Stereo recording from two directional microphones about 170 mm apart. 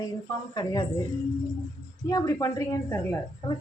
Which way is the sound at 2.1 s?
20° left (ahead or behind).